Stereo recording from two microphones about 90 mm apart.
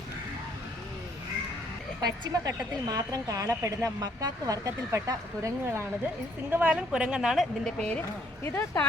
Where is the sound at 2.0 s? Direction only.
45° right (ahead or behind).